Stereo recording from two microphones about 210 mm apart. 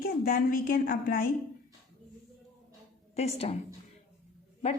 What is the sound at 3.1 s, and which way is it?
Speech, 30° left (ahead or behind).